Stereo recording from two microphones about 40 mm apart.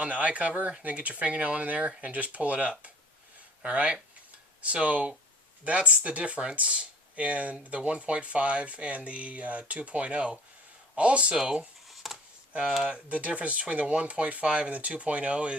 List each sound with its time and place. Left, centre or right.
0.0 s speech: right
12.0 s a sound: centre
12.9 s speech: right